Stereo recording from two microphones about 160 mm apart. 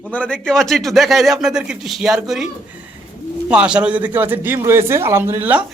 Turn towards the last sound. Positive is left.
turn(degrees=-10)  # may be behind; listen again after turning